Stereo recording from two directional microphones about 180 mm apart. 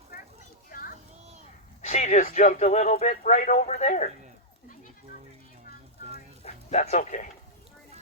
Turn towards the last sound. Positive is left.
turn(degrees=45)  # may be behind; listen again after turning